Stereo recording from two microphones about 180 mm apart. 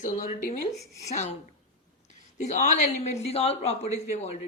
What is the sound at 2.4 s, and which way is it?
Speech, 40° left (ahead or behind).